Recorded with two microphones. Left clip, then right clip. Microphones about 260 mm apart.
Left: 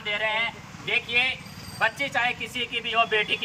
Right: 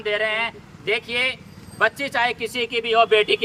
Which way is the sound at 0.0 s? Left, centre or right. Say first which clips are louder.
Right 4 dB; centre.